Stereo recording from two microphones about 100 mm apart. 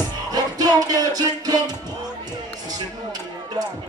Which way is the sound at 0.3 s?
40° right (ahead or behind).